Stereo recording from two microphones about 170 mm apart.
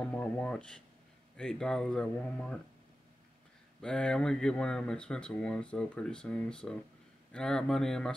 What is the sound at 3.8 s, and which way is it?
Speech, 5° left (ahead or behind).